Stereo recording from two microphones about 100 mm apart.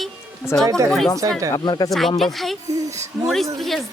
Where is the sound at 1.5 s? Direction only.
45° left (ahead or behind).